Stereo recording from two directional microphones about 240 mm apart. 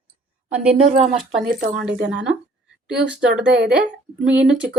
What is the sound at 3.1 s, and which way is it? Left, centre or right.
Speech, centre.